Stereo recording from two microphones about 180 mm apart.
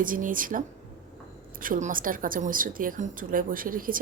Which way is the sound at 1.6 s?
50° right (ahead or behind).